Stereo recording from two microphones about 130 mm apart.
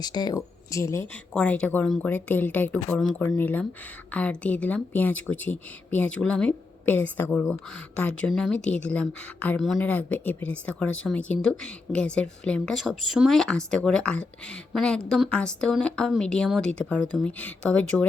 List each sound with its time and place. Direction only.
0.0 s speech: 30° left (ahead or behind)
1.3 s speech: 10° left (ahead or behind)